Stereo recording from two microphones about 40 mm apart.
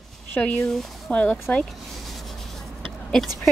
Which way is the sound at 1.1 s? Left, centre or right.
Left.